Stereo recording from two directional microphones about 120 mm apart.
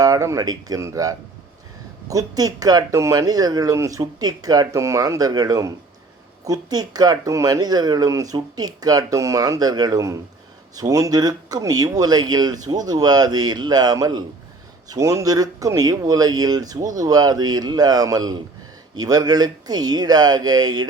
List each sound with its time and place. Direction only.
0.0 s speech: 25° right (ahead or behind)